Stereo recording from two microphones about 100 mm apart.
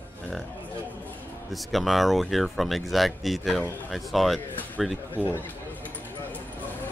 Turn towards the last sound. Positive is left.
turn(degrees=20)  # may be behind; listen again after turning